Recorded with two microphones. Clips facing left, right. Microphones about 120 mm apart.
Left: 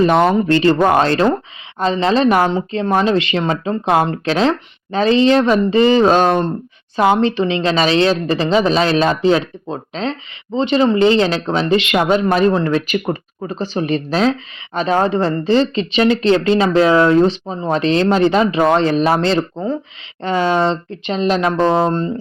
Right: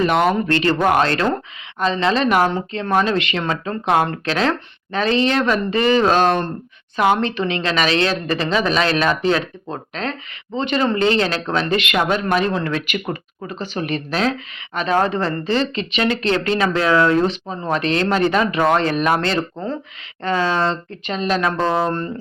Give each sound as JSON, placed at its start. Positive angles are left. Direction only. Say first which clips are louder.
{"t": 0.0, "sound": "speech", "louder": "left 4 dB", "side_deg": 30}
{"t": 3.4, "sound": "speech", "louder": "left 4 dB", "side_deg": 20}
{"t": 3.8, "sound": "speech", "louder": "left 2 dB", "side_deg": 30}
{"t": 6.2, "sound": "speech", "louder": "left 3 dB", "side_deg": 15}
{"t": 6.9, "sound": "speech", "louder": "left 4 dB", "side_deg": 30}